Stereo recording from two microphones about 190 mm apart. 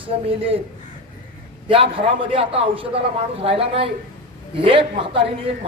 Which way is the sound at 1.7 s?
30° right (ahead or behind).